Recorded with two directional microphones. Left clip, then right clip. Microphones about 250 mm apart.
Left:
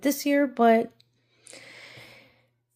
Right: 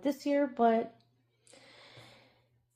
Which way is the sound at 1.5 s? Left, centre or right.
Left.